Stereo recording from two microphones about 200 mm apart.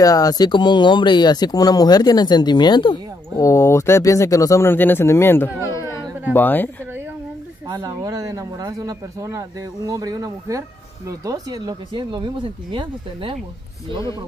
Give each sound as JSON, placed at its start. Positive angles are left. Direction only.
{"t": 0.0, "sound": "speech", "side_deg": 20}
{"t": 5.7, "sound": "a sound", "side_deg": 15}
{"t": 6.3, "sound": "speech", "side_deg": 10}
{"t": 7.6, "sound": "speech", "side_deg": -20}